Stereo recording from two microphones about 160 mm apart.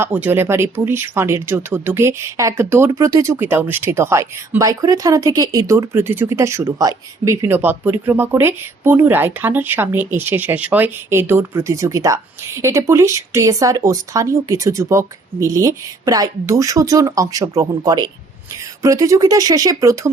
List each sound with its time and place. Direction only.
0.0 s speech: 10° right (ahead or behind)